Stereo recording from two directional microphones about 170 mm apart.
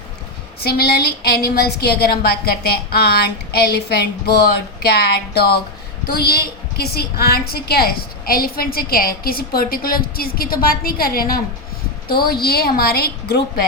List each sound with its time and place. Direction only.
0.6 s a woman's voice: 70° left (ahead or behind)